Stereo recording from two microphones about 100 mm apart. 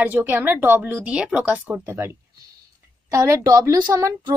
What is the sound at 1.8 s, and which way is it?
A woman's voice, 25° right (ahead or behind).